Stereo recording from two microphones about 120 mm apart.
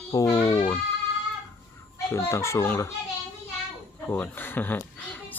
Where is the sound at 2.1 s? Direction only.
25° left (ahead or behind).